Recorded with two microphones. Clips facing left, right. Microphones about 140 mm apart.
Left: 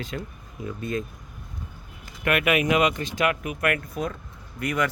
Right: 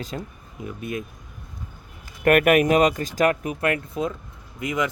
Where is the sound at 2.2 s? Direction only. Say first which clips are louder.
Right 6 dB; 45° right (ahead or behind).